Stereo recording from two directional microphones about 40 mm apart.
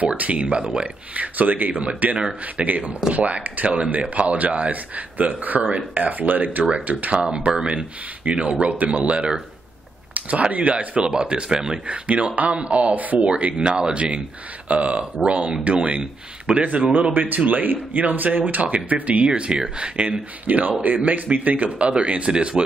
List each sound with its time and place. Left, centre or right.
0.0 s speech: right
1.1 s speech: right
6.7 s speech: right
8.3 s speech: right
10.5 s speech: right
11.9 s speech: right
14.7 s speech: right
17.1 s speech: right
19.2 s speech: right
20.4 s speech: right